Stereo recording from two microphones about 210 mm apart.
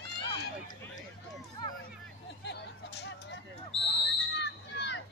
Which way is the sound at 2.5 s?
55° left (ahead or behind).